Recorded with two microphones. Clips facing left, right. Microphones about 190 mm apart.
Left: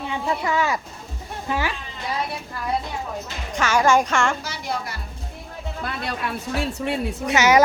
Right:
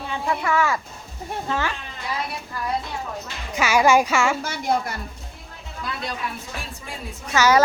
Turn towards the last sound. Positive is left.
turn(degrees=20)  # may be behind; listen again after turning